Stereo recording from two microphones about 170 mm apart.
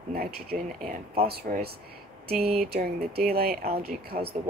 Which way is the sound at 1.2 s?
65° right (ahead or behind).